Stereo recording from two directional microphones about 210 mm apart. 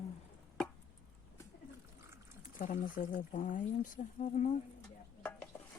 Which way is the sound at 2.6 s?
40° left (ahead or behind).